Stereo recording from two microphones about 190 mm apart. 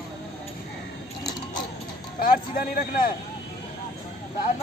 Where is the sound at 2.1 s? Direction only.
50° left (ahead or behind).